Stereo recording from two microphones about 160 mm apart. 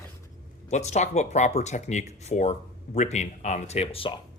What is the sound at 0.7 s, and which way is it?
Speech, 45° left (ahead or behind).